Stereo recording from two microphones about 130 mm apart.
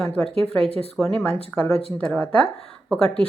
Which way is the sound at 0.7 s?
50° left (ahead or behind).